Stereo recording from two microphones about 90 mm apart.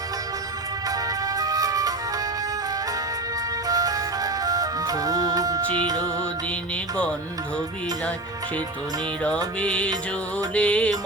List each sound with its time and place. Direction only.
0.9 s music: 45° right (ahead or behind)
3.7 s music: 45° right (ahead or behind)
9.6 s music: 15° left (ahead or behind)